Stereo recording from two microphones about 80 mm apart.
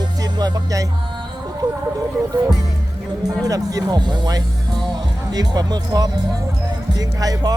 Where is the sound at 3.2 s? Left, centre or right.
Right.